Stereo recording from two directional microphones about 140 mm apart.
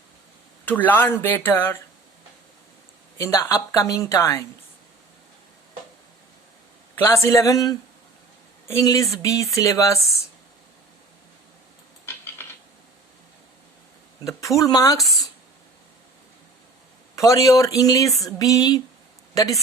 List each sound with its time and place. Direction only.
0.6 s speech: 10° left (ahead or behind)
3.2 s speech: 20° left (ahead or behind)
6.9 s speech: 20° left (ahead or behind)
12.0 s a sound: 15° left (ahead or behind)
14.3 s speech: 20° left (ahead or behind)
14.9 s a sound: centre (ahead or behind)
17.2 s speech: 25° left (ahead or behind)